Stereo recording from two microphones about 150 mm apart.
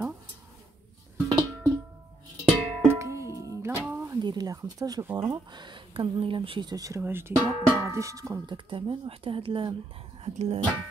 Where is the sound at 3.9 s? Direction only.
20° right (ahead or behind).